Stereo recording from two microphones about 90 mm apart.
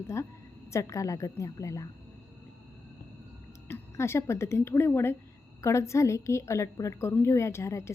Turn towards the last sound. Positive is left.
turn(degrees=30)  # may be behind; listen again after turning